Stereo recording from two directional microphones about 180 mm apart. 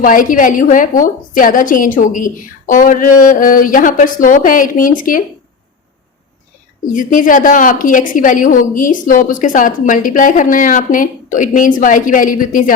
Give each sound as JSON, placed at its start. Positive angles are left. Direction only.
{"t": 0.0, "sound": "a woman's voice", "side_deg": 50}
{"t": 6.9, "sound": "a woman's voice", "side_deg": 50}